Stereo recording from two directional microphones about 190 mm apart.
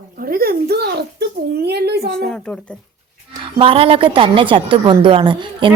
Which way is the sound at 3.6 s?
30° right (ahead or behind).